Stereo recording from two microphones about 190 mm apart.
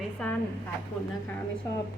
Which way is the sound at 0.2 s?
5° left (ahead or behind).